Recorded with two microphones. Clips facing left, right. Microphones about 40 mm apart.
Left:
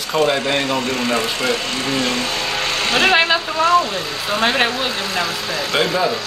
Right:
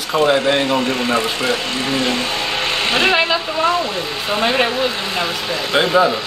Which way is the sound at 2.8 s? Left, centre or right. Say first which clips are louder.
Left 1 dB; centre.